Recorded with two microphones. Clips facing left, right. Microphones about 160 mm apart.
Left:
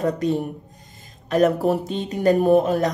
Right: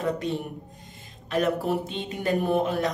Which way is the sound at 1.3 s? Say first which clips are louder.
Left 6 dB; 40° left (ahead or behind).